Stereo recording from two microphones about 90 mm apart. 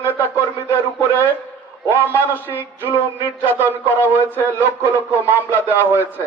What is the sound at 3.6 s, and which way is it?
Speech, 20° right (ahead or behind).